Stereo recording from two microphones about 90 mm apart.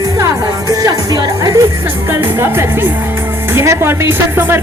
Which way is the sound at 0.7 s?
40° right (ahead or behind).